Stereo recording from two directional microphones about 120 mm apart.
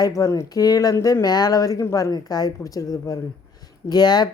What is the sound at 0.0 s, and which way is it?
A woman's voice, 30° left (ahead or behind).